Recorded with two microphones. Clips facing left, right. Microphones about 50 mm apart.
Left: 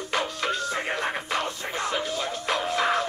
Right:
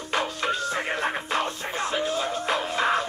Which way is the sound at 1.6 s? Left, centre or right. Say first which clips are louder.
Right 1 dB; right.